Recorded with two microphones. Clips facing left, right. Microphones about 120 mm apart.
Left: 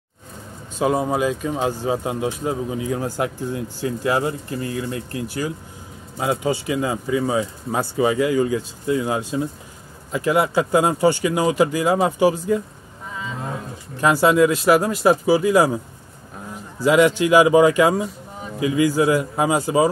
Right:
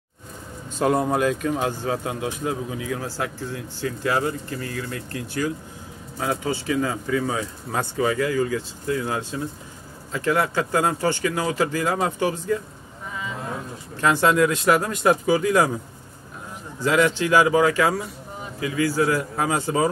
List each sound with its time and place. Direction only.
0.7 s speech: 5° left (ahead or behind)
1.5 s a man's voice: 15° left (ahead or behind)
14.0 s a man's voice: 10° left (ahead or behind)
16.8 s a man's voice: 10° left (ahead or behind)